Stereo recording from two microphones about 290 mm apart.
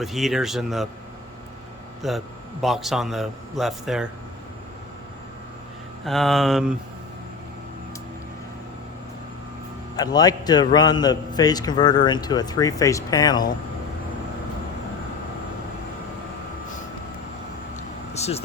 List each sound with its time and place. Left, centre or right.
0.0 s a man's voice: centre
2.0 s a man's voice: centre
6.1 s a man's voice: centre
9.9 s a man's voice: centre
17.7 s vehicle: left